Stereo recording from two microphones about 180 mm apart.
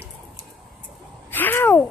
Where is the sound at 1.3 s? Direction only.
10° left (ahead or behind).